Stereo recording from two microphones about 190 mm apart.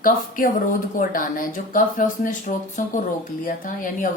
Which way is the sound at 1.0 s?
45° left (ahead or behind).